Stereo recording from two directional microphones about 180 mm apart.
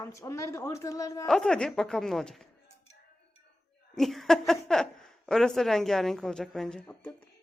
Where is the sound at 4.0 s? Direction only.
Centre (ahead or behind).